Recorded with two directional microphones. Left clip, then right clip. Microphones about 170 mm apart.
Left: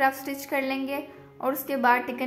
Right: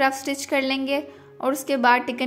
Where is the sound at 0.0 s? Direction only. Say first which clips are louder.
Right 3 dB; 30° right (ahead or behind).